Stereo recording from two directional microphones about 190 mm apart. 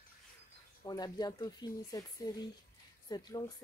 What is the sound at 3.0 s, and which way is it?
Speech, 20° left (ahead or behind).